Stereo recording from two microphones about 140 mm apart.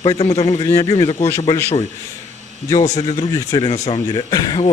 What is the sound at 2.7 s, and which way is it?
Speech, 25° left (ahead or behind).